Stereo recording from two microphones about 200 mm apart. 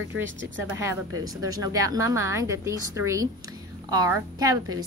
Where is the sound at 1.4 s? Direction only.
20° right (ahead or behind).